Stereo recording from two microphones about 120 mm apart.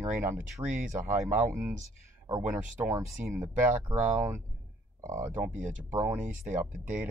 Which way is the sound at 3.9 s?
60° right (ahead or behind).